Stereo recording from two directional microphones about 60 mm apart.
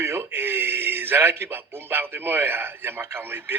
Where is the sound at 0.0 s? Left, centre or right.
Right.